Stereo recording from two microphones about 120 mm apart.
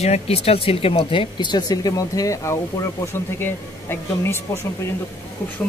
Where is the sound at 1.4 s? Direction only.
35° left (ahead or behind).